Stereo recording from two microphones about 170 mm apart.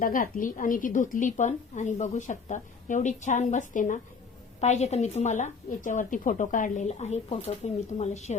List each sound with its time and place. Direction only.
0.0 s a woman's voice: 55° left (ahead or behind)